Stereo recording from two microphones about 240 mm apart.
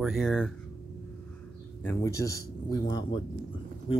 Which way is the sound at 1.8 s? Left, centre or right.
Centre.